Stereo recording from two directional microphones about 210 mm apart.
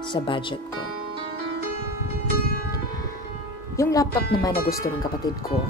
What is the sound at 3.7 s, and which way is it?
Speech, 15° left (ahead or behind).